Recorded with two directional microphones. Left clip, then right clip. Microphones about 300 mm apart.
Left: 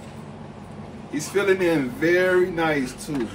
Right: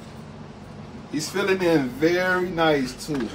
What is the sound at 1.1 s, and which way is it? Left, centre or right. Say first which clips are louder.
Speech: left 2 dB; centre.